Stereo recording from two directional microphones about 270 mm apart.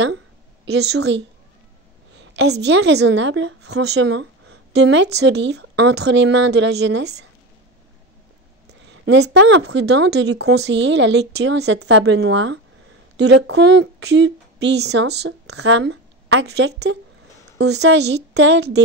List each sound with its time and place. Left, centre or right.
0.7 s a woman's voice: right
9.0 s a woman's voice: right